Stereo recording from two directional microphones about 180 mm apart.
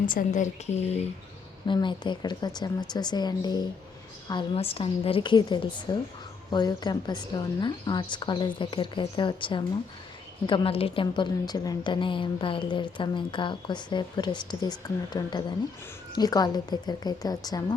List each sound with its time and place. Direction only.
0.0 s a woman's voice: 50° left (ahead or behind)
1.6 s a woman's voice: 25° left (ahead or behind)